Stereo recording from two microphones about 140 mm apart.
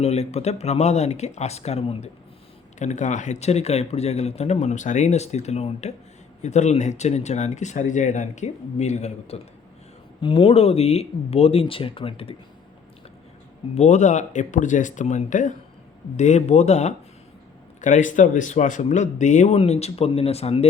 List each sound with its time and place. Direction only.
0.0 s speech: 50° left (ahead or behind)
10.2 s speech: 40° left (ahead or behind)
13.7 s speech: 55° left (ahead or behind)